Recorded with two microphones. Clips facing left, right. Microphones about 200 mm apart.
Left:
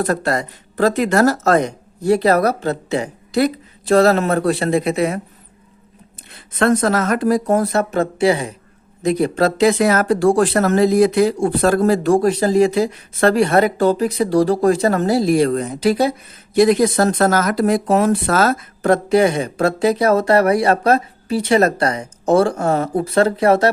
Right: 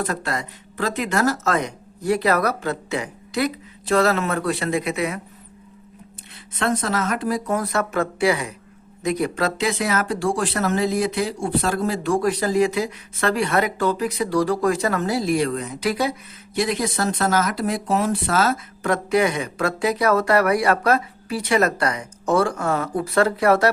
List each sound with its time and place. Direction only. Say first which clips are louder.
0.0 s speech: left 7 dB; 40° left (ahead or behind)
6.6 s speech: left 7 dB; 45° left (ahead or behind)
12.1 s speech: left 5 dB; 30° left (ahead or behind)
16.6 s speech: left 10 dB; 40° left (ahead or behind); by 23.7 s 25° left (ahead or behind)